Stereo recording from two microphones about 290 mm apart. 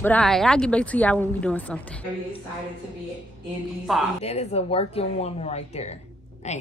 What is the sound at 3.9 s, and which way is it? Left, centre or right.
Speech, centre.